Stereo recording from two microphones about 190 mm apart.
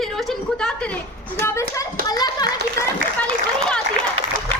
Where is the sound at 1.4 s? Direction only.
15° left (ahead or behind).